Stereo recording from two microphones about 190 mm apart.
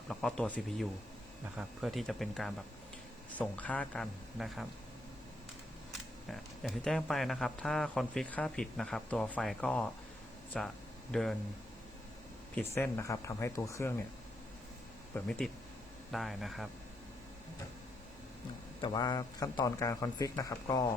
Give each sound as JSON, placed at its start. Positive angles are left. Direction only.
{"t": 0.1, "sound": "speech", "side_deg": 0}
{"t": 6.3, "sound": "speech", "side_deg": 0}
{"t": 12.5, "sound": "speech", "side_deg": 10}
{"t": 15.1, "sound": "speech", "side_deg": 5}
{"t": 18.8, "sound": "a man's voice", "side_deg": 20}